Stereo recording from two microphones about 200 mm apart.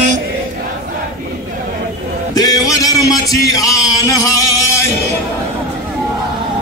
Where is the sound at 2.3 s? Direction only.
15° left (ahead or behind).